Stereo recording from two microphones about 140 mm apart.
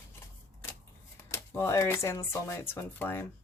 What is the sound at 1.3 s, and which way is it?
Speech, 20° left (ahead or behind).